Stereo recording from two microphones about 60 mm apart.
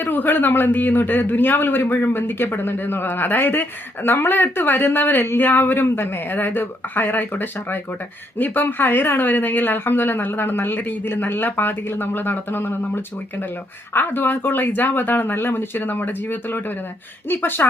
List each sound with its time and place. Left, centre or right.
0.0 s a man's voice: left
13.9 s a man's voice: left